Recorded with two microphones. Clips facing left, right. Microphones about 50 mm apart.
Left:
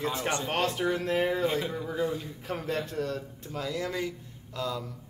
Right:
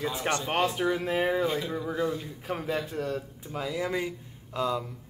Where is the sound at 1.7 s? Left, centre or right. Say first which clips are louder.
Right 1 dB; centre.